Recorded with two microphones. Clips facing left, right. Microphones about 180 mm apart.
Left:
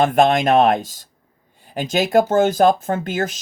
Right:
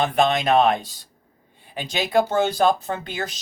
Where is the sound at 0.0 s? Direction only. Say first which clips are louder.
Left 5 dB; 45° left (ahead or behind).